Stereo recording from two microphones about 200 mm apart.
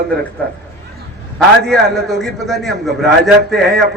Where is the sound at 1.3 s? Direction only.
Centre (ahead or behind).